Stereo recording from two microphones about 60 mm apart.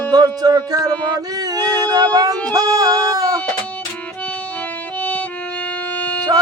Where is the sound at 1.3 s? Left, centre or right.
Right.